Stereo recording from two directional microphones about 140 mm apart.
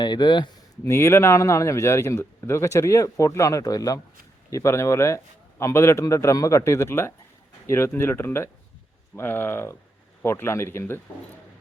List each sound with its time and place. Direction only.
0.0 s speech: 30° left (ahead or behind)
0.9 s a man's voice: 20° left (ahead or behind)